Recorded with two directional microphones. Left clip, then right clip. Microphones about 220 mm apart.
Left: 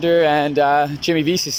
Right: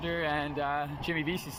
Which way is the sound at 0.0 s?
50° left (ahead or behind).